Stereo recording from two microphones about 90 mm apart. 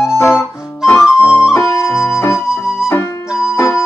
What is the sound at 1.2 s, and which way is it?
Flute, 10° right (ahead or behind).